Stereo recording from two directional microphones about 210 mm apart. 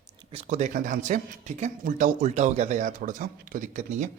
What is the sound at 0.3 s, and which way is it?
Speech, 35° right (ahead or behind).